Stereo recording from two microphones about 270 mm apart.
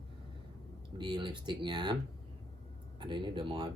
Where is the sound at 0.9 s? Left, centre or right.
Centre.